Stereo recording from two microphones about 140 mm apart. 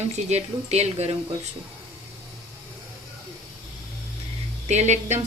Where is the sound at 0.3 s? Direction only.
50° right (ahead or behind).